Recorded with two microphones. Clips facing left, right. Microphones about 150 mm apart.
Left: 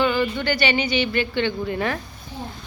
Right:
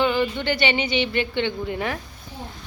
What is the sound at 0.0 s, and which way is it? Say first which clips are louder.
Speech: even; 20° right (ahead or behind).